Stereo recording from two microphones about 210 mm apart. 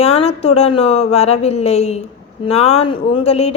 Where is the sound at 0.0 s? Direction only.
30° left (ahead or behind).